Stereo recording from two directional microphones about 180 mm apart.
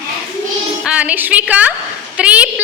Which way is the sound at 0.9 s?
5° right (ahead or behind).